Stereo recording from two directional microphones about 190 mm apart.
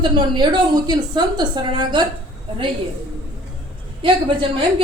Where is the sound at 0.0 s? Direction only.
25° right (ahead or behind).